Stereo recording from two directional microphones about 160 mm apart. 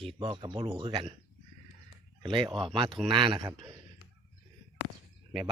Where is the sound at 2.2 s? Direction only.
30° right (ahead or behind).